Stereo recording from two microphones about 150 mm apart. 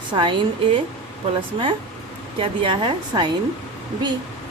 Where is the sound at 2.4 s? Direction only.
35° right (ahead or behind).